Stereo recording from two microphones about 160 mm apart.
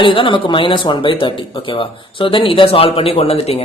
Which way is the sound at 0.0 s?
30° left (ahead or behind).